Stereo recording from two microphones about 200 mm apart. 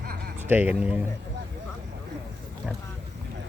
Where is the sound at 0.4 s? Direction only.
10° right (ahead or behind).